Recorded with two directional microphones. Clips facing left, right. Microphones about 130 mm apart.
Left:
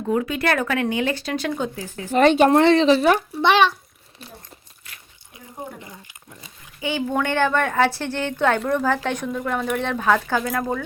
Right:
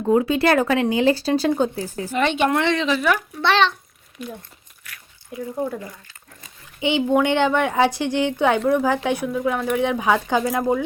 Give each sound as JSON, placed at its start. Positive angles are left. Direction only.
{"t": 0.0, "sound": "speech", "side_deg": -30}
{"t": 2.1, "sound": "speech", "side_deg": 40}
{"t": 3.3, "sound": "a child's voice", "side_deg": 10}
{"t": 4.2, "sound": "speech", "side_deg": 30}
{"t": 4.9, "sound": "biting", "side_deg": 25}
{"t": 6.7, "sound": "a woman's voice", "side_deg": -20}
{"t": 9.8, "sound": "a woman's voice", "side_deg": -15}